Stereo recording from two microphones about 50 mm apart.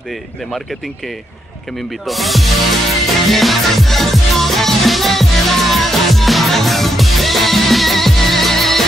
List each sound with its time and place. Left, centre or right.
0.1 s speech: centre
2.0 s music: centre